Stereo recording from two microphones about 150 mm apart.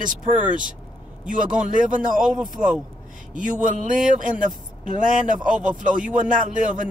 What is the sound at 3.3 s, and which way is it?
Speech, 60° right (ahead or behind).